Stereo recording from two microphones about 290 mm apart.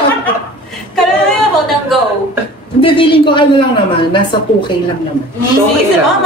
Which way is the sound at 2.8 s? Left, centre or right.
Centre.